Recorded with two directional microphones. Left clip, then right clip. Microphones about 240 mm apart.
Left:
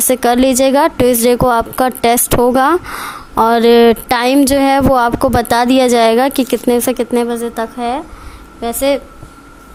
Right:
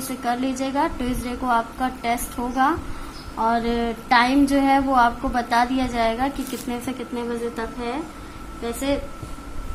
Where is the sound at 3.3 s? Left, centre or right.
Left.